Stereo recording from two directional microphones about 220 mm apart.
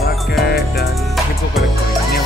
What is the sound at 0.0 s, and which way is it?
Music, 45° left (ahead or behind).